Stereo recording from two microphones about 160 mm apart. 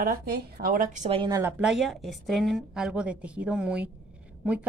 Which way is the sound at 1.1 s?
30° right (ahead or behind).